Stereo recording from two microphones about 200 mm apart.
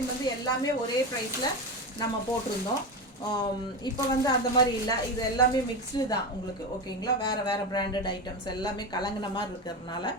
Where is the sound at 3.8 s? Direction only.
20° left (ahead or behind).